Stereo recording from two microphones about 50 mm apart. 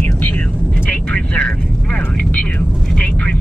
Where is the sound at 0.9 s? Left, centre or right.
Left.